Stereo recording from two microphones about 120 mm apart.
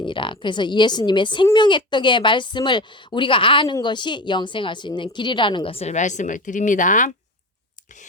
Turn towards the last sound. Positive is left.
turn(degrees=90)